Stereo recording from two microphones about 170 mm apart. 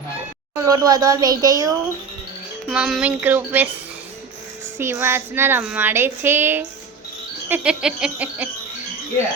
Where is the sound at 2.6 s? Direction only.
5° right (ahead or behind).